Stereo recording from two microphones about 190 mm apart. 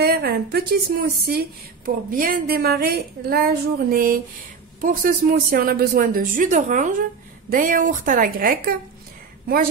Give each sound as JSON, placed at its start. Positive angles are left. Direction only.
{"t": 0.0, "sound": "speech", "side_deg": -55}